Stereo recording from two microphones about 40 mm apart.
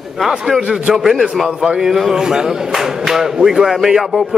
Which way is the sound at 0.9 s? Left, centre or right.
Centre.